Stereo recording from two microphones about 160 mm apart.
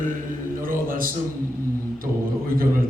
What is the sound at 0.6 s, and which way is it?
Speech, 60° right (ahead or behind).